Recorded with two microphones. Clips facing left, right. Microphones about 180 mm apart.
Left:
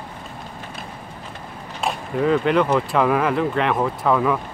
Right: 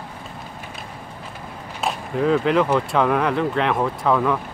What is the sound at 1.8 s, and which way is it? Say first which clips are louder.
Speech: even; centre (ahead or behind).